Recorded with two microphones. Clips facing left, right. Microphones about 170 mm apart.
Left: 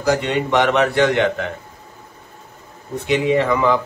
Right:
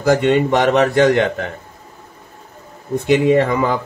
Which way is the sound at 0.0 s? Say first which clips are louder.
Right 5 dB; 50° right (ahead or behind).